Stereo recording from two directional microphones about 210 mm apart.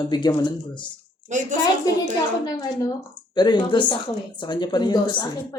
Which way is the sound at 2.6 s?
20° left (ahead or behind).